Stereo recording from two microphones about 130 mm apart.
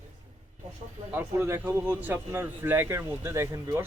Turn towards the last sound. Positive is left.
turn(degrees=-25)  # may be behind; listen again after turning